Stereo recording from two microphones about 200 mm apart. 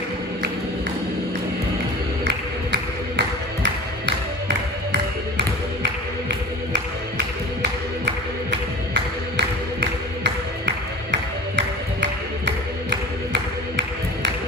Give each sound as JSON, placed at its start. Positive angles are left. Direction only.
{"t": 2.7, "sound": "music", "side_deg": -60}
{"t": 8.0, "sound": "music", "side_deg": -60}